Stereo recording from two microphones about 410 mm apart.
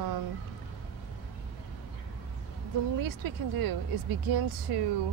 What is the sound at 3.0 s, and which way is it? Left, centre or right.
Speech, right.